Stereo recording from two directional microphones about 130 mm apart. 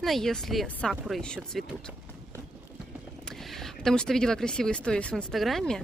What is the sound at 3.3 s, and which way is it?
Speech, 5° left (ahead or behind).